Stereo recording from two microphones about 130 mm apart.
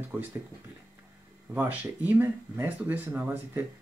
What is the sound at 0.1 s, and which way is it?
Speech, 10° right (ahead or behind).